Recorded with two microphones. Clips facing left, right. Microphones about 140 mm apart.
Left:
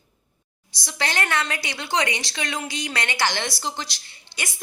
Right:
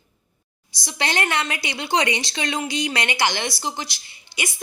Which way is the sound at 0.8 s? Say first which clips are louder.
Right 2 dB; 20° right (ahead or behind).